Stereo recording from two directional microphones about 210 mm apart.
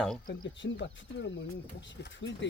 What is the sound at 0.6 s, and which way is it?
Speech, 50° left (ahead or behind).